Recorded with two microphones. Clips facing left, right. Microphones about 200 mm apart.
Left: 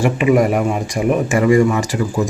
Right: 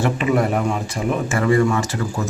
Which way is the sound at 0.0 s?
10° left (ahead or behind).